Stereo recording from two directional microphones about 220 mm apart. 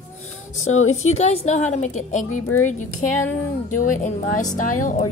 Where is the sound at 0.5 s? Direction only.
70° left (ahead or behind).